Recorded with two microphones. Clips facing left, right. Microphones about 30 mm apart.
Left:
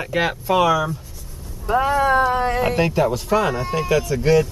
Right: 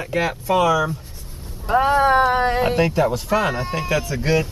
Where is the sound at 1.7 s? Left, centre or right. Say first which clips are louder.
Right 1 dB; right.